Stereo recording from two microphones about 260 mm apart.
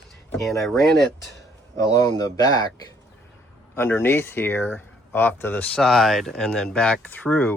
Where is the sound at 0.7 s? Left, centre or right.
Centre.